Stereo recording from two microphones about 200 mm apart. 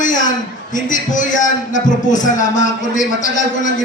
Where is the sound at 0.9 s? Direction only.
40° left (ahead or behind).